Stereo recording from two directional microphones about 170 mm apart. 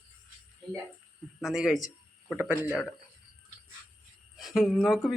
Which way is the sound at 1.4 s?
Centre (ahead or behind).